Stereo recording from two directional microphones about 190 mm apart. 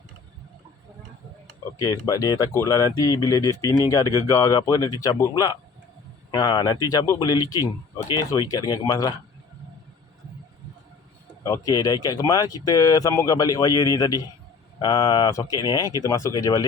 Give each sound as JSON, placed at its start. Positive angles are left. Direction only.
{"t": 2.0, "sound": "speech", "side_deg": 20}
{"t": 11.4, "sound": "speech", "side_deg": 20}